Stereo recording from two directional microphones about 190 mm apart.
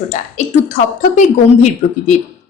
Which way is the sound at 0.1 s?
40° left (ahead or behind).